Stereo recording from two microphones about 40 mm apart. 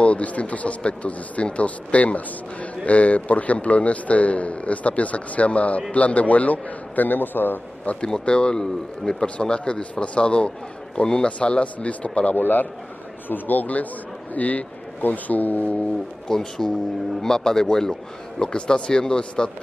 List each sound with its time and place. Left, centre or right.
0.0 s speech: left
8.0 s speech: left
12.4 s speech: left
16.3 s speech: centre